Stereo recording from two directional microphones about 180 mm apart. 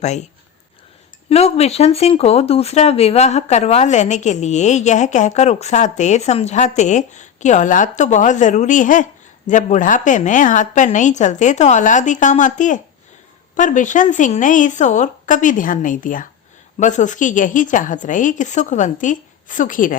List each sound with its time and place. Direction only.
0.0 s speech: 40° left (ahead or behind)
1.3 s a woman's voice: 35° left (ahead or behind)